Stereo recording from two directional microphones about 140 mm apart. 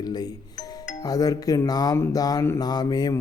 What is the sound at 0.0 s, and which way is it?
Music, 30° left (ahead or behind).